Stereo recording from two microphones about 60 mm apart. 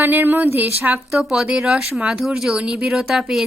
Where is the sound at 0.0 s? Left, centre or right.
Right.